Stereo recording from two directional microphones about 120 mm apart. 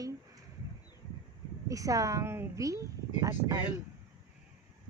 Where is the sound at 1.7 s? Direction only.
30° right (ahead or behind).